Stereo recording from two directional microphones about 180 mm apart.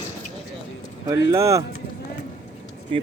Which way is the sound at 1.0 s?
20° right (ahead or behind).